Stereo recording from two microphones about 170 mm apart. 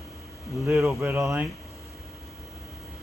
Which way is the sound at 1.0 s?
15° right (ahead or behind).